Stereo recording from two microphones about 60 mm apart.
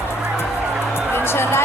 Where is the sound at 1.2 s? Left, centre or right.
Left.